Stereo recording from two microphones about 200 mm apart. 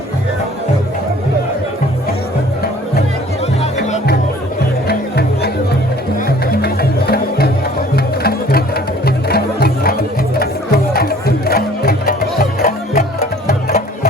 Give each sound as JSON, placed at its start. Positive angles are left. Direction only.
{"t": 4.9, "sound": "music", "side_deg": 55}